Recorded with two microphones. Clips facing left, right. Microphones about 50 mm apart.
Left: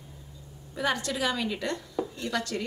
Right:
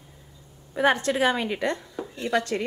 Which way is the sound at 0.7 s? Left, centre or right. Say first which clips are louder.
Right 7 dB; right.